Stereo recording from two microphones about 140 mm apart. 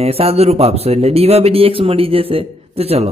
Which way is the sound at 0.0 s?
45° right (ahead or behind).